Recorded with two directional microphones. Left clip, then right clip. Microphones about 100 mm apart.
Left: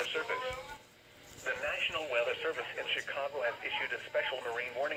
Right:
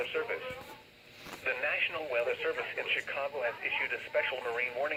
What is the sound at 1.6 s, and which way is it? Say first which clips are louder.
Speech: right 2 dB; 30° right (ahead or behind).